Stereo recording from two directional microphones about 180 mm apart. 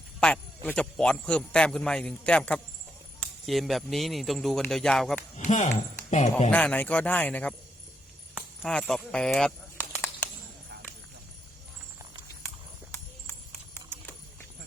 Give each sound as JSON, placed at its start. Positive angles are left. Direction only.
{"t": 0.2, "sound": "a man's voice", "side_deg": 5}
{"t": 5.4, "sound": "speech", "side_deg": 40}
{"t": 6.5, "sound": "speech", "side_deg": 10}
{"t": 8.6, "sound": "a sound", "side_deg": 5}